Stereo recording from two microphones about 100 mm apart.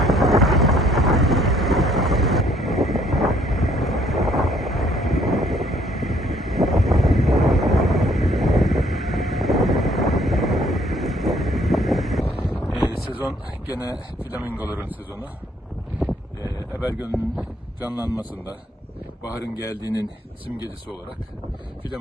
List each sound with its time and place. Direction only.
0.0 s thunder: centre (ahead or behind)
13.1 s speech: 15° right (ahead or behind)
16.8 s speech: 15° right (ahead or behind)
19.2 s speech: 35° left (ahead or behind)